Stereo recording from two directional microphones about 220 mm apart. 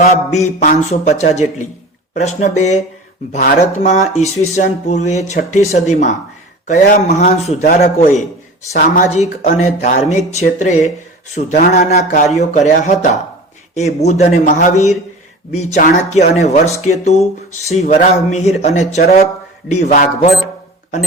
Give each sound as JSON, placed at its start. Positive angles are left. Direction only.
{"t": 0.4, "sound": "speech", "side_deg": 35}